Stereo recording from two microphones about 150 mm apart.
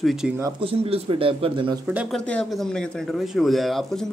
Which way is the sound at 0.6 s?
40° right (ahead or behind).